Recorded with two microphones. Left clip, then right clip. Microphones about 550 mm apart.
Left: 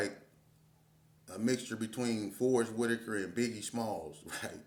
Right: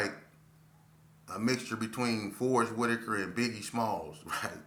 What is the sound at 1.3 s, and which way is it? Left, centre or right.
Speech, left.